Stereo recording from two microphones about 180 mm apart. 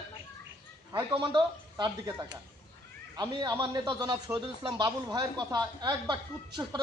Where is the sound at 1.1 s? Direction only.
25° right (ahead or behind).